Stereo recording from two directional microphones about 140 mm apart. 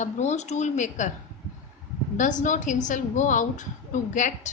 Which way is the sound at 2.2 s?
65° left (ahead or behind).